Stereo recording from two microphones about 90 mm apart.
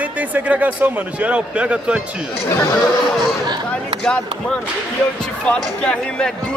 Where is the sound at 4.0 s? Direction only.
10° left (ahead or behind).